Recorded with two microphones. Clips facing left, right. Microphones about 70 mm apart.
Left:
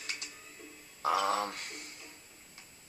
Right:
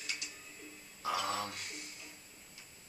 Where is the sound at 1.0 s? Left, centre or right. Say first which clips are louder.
Left 6 dB; left.